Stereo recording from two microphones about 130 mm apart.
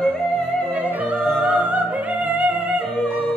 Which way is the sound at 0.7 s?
10° right (ahead or behind).